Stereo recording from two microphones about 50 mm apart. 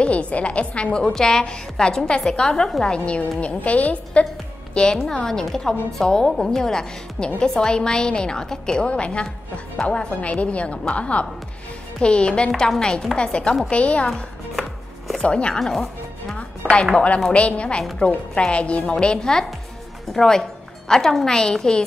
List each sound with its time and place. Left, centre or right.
0.0 s a woman's voice: left
3.2 s a woman's voice: left
14.5 s chopping: centre
15.2 s a woman's voice: centre
15.6 s speech: centre
16.3 s a woman's voice: left